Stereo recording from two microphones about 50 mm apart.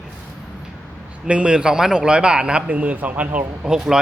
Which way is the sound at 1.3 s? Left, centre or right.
Right.